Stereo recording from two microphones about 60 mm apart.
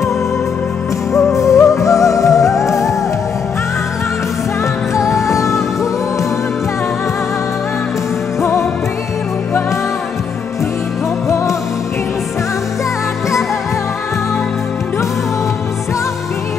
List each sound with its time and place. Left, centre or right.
1.1 s music: left
5.2 s music: left
8.4 s music: left